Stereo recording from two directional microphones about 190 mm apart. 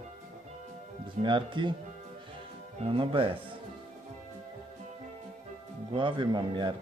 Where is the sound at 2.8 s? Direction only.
25° right (ahead or behind).